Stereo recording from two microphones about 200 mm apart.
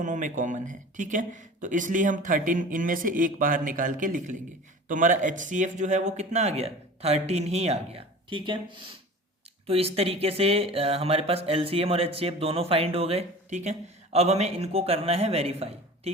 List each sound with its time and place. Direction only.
0.0 s speech: 40° right (ahead or behind)